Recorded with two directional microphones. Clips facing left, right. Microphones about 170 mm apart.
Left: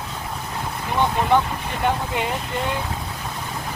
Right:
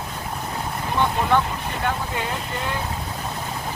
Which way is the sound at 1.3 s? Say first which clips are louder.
Left 2 dB; 15° left (ahead or behind).